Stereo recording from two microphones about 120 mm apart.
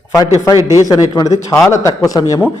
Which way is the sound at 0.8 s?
30° left (ahead or behind).